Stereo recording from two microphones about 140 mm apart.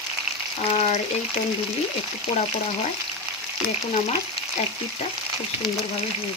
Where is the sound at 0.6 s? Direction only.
50° left (ahead or behind).